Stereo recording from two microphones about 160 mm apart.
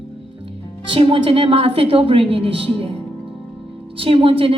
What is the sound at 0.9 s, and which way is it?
A woman's voice, 35° right (ahead or behind).